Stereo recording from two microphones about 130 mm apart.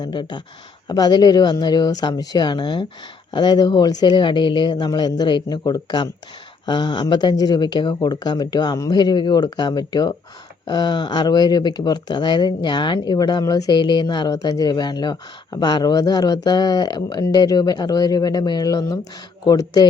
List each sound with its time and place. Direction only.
0.0 s speech: 35° left (ahead or behind)